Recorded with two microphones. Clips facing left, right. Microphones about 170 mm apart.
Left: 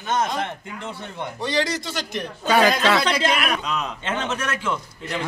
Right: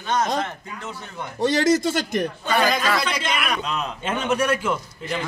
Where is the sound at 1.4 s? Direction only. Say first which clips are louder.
Right 7 dB; 45° right (ahead or behind).